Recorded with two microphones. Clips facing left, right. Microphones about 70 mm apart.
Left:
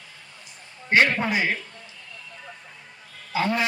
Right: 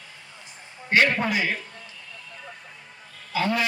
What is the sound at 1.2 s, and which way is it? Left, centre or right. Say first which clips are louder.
Speech: left 1 dB; left.